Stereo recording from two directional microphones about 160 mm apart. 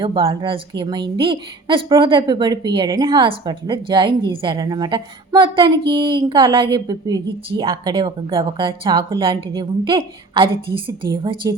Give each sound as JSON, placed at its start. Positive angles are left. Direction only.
{"t": 0.0, "sound": "a woman's voice", "side_deg": -35}